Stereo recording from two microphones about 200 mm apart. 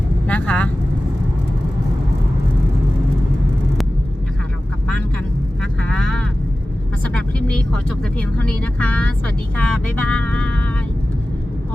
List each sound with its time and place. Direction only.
0.3 s vehicle: 5° left (ahead or behind)
5.8 s vehicle: 5° left (ahead or behind)